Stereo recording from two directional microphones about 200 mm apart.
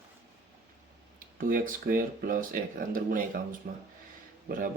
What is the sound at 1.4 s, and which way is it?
Speech, 45° right (ahead or behind).